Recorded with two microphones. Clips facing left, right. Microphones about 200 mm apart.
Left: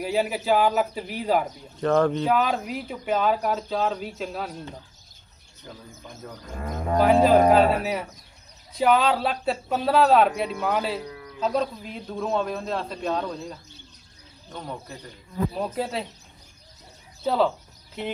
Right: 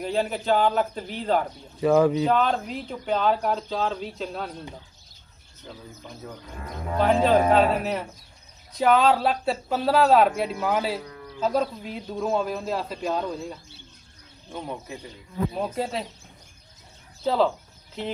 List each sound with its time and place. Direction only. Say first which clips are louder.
0.0 s a man's voice: left 1 dB; 5° left (ahead or behind)
1.8 s speech: right 2 dB; 5° right (ahead or behind)
2.2 s speech: right 1 dB; 5° left (ahead or behind)
6.4 s speech: left 7 dB; 45° left (ahead or behind)
7.2 s speech: left 2 dB; 5° left (ahead or behind)
17.2 s speech: even; centre (ahead or behind)